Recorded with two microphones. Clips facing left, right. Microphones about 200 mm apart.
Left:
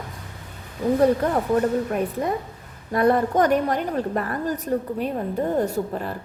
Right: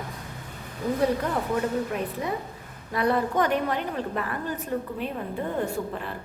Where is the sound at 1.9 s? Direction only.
50° left (ahead or behind).